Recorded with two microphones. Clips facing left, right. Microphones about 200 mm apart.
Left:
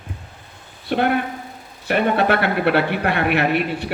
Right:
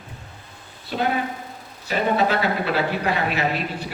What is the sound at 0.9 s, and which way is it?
Speech, 65° left (ahead or behind).